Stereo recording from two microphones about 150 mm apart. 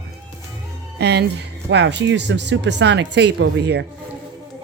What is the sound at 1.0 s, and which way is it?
Speech, 90° right.